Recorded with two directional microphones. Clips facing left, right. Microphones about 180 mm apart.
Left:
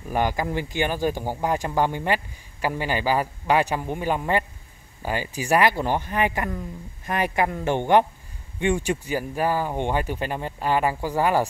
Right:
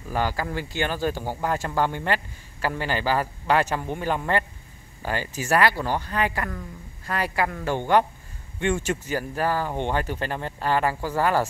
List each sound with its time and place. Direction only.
0.1 s speech: 15° left (ahead or behind)